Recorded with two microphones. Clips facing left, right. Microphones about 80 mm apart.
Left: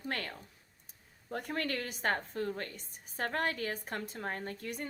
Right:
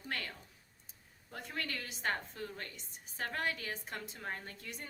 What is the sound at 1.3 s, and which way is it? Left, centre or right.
A woman's voice, left.